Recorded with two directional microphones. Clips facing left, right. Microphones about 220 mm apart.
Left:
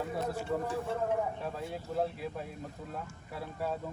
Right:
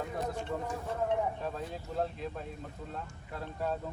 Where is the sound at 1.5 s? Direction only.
5° left (ahead or behind).